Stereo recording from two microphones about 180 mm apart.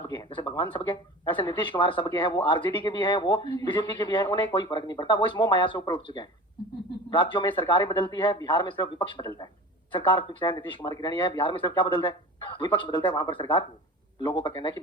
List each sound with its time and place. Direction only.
0.1 s speech: 25° left (ahead or behind)